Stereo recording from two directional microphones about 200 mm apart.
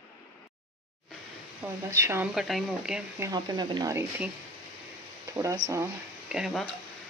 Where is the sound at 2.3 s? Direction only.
Centre (ahead or behind).